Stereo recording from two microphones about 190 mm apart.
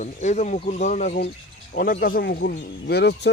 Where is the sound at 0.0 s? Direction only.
40° left (ahead or behind).